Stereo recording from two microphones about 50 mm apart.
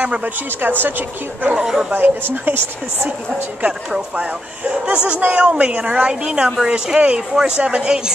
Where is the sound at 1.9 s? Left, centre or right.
Right.